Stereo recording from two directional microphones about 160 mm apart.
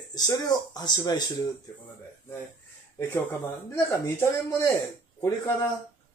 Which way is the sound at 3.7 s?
15° left (ahead or behind).